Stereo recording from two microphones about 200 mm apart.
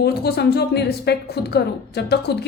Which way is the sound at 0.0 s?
50° left (ahead or behind).